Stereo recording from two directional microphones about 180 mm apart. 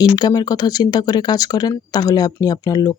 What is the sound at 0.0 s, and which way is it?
Speech, 20° left (ahead or behind).